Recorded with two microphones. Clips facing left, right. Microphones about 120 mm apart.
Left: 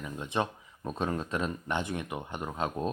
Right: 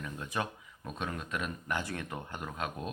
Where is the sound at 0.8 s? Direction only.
35° left (ahead or behind).